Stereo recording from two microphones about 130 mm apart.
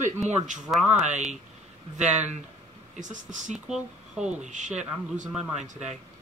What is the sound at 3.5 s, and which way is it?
Speech, 5° right (ahead or behind).